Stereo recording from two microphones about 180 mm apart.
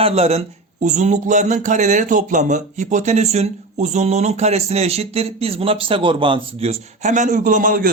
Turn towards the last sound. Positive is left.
turn(degrees=-50)  # may be behind; listen again after turning